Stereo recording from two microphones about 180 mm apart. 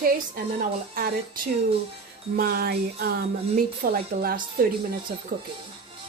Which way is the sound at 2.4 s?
60° right (ahead or behind).